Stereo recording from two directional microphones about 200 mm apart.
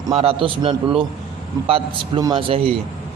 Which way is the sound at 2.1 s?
25° right (ahead or behind).